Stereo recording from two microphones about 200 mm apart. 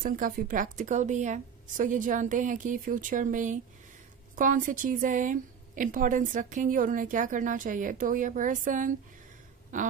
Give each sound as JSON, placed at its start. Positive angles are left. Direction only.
{"t": 0.0, "sound": "a woman's voice", "side_deg": -45}